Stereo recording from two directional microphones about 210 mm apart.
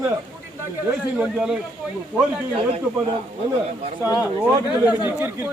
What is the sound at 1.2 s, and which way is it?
Speech, centre (ahead or behind).